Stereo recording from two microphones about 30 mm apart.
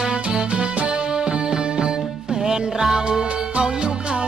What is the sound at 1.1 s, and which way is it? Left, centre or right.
Music, right.